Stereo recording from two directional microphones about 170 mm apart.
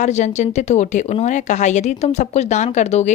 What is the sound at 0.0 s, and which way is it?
A woman's voice, 45° left (ahead or behind).